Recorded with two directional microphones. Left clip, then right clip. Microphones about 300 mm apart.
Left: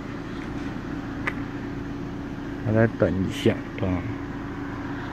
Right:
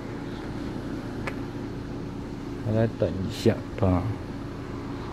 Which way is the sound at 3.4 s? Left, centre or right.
Centre.